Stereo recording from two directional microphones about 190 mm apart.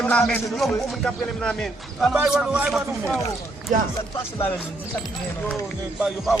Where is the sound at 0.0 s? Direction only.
5° left (ahead or behind).